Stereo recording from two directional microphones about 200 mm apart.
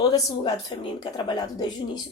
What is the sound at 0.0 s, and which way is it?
Speech, 20° left (ahead or behind).